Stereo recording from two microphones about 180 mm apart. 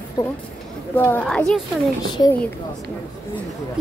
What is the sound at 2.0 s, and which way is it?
Speech, 25° left (ahead or behind).